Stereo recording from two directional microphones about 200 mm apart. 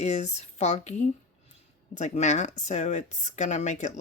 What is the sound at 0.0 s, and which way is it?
Speech, 35° left (ahead or behind).